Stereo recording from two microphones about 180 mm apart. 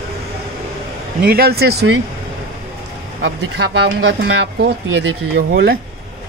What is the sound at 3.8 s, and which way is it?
Speech, 60° right (ahead or behind).